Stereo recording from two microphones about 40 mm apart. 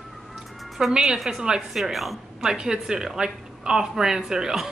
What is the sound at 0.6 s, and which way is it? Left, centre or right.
Music, centre.